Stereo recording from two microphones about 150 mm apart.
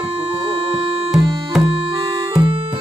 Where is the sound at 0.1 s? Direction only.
40° right (ahead or behind).